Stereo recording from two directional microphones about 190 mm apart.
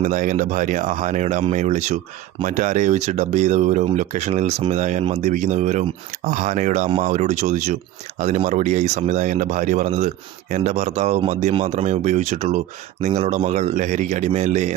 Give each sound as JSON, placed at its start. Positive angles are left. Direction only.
{"t": 0.0, "sound": "speech", "side_deg": -40}